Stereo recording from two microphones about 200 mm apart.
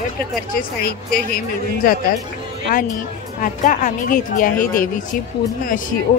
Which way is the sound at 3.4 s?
40° left (ahead or behind).